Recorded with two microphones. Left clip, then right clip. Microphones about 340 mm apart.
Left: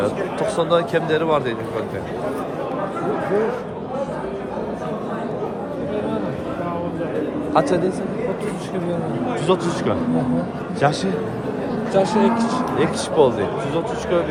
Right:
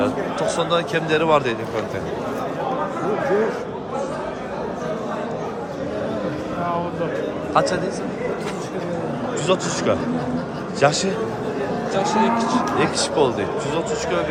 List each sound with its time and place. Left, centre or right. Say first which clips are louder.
0.3 s a man's voice: left 2 dB; centre
7.5 s a man's voice: left 1 dB; centre
9.5 s a man's voice: left 1 dB; centre
10.8 s a man's voice: right 2 dB; centre
11.9 s speech: left 2 dB; centre
12.8 s a man's voice: left 5 dB; centre